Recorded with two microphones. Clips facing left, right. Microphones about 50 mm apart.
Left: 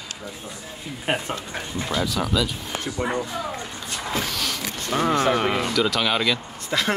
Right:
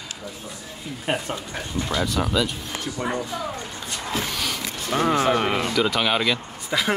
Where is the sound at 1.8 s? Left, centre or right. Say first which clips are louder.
Even; centre.